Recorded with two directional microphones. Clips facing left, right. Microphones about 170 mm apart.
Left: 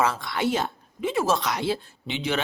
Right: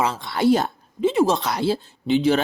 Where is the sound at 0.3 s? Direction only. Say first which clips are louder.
Right 9 dB; 40° right (ahead or behind).